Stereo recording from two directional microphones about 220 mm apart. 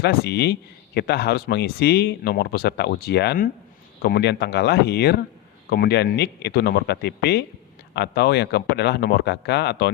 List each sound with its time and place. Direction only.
0.0 s speech: 45° left (ahead or behind)